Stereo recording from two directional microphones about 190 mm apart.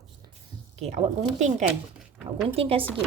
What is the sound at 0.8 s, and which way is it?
Speech, 35° right (ahead or behind).